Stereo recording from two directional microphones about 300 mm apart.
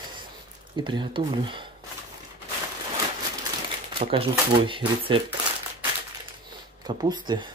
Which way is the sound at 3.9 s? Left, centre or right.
Centre.